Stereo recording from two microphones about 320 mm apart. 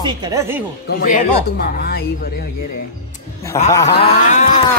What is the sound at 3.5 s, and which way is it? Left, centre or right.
Speech, centre.